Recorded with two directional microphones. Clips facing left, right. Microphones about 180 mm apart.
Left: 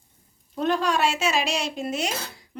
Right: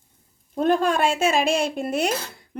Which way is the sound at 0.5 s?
50° right (ahead or behind).